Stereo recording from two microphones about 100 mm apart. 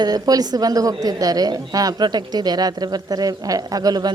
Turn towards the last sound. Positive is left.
turn(degrees=-40)  # may be behind; listen again after turning